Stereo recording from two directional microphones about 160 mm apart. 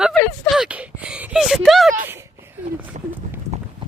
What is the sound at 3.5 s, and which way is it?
Clip-clop, 45° right (ahead or behind).